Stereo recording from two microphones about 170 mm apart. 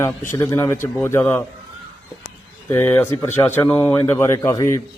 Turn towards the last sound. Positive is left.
turn(degrees=15)  # may be behind; listen again after turning